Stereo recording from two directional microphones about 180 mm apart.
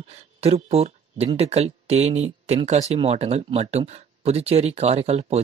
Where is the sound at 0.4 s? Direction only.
35° right (ahead or behind).